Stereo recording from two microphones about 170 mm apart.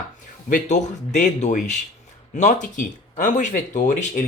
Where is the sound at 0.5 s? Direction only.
45° left (ahead or behind).